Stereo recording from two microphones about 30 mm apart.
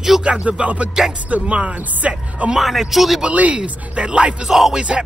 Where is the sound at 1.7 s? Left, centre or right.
Right.